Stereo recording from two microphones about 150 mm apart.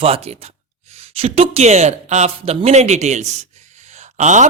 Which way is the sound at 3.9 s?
50° right (ahead or behind).